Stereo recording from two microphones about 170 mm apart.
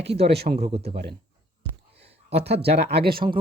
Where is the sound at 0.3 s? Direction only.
65° right (ahead or behind).